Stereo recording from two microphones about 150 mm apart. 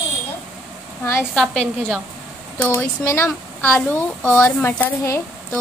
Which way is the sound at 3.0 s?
15° left (ahead or behind).